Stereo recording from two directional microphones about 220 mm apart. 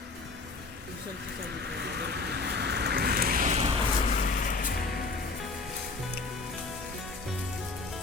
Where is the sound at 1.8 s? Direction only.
50° right (ahead or behind); by 3.7 s 35° right (ahead or behind).